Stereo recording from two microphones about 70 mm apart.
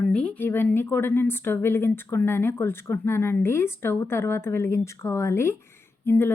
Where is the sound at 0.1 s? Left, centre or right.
Centre.